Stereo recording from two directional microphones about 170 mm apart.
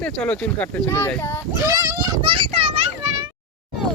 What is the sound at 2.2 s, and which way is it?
Children playing, 30° right (ahead or behind).